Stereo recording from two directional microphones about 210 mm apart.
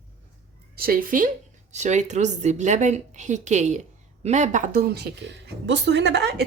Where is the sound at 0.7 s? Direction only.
45° right (ahead or behind).